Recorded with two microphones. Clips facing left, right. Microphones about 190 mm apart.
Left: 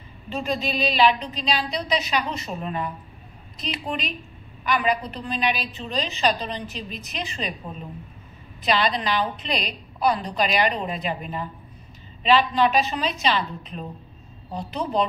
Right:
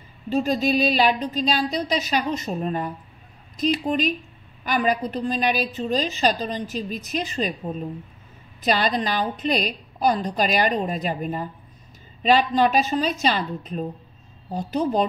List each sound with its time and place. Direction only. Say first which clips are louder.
0.3 s a woman's voice: right 6 dB; 45° right (ahead or behind)
8.6 s a woman's voice: right 1 dB; 45° right (ahead or behind)